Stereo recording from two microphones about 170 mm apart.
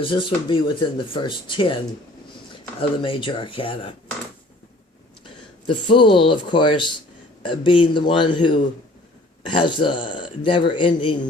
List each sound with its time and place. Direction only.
0.0 s a man's voice: 30° left (ahead or behind)
3.0 s speech: 30° left (ahead or behind)
5.2 s a man's voice: 30° left (ahead or behind)